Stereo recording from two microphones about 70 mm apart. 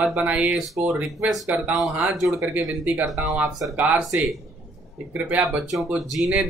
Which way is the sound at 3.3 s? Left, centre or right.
Centre.